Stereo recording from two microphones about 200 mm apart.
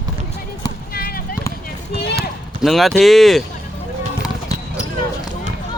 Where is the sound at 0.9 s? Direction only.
45° left (ahead or behind).